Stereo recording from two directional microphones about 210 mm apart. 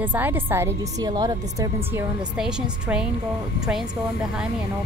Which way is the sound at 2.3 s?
5° right (ahead or behind).